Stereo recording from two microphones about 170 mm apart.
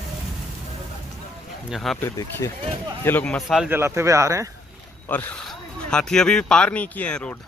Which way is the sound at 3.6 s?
15° right (ahead or behind).